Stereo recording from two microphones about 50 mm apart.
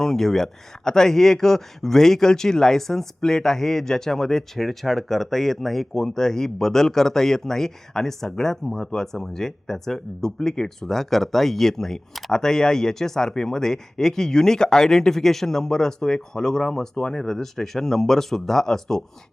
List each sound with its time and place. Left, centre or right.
0.0 s speech: centre